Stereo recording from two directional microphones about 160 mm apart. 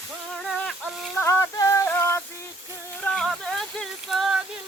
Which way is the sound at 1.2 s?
20° left (ahead or behind).